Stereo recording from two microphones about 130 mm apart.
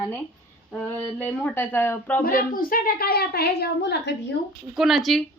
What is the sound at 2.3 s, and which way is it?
Speech, 90° left.